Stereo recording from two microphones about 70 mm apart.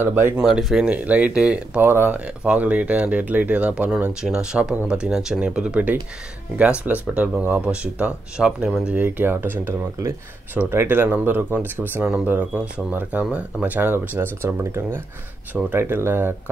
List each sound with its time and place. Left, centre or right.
0.0 s speech: right
0.4 s speech: centre
0.8 s speech: right
1.8 s speech: right
2.1 s speech: centre
4.1 s speech: centre
13.7 s speech: right
15.5 s speech: right
15.8 s speech: right